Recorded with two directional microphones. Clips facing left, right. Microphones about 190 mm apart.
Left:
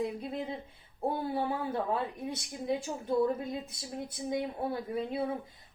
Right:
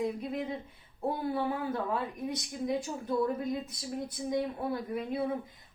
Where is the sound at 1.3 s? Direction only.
30° left (ahead or behind).